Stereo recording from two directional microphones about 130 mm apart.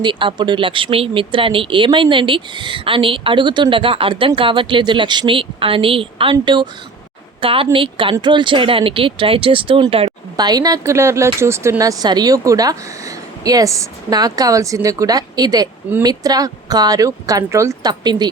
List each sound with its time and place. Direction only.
0.0 s speech: 40° right (ahead or behind)
10.1 s speech: 30° right (ahead or behind)
18.0 s speech: 35° right (ahead or behind)